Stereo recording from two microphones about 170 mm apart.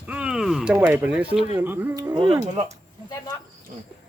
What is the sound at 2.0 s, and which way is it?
Speech, 25° right (ahead or behind).